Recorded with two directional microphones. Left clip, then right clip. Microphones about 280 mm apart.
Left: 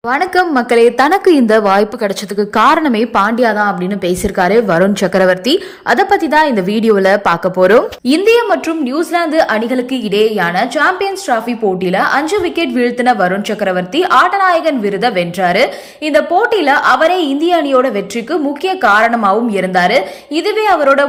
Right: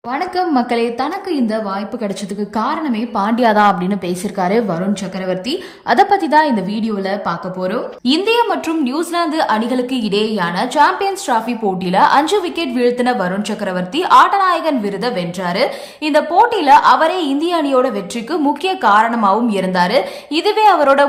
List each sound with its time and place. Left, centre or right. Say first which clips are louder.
0.1 s a woman's voice: left 5 dB; centre